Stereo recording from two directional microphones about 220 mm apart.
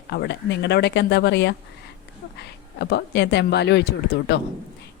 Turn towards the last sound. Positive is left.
turn(degrees=50)  # may be behind; listen again after turning